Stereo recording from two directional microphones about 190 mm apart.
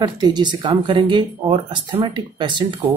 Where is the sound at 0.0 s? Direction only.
20° right (ahead or behind).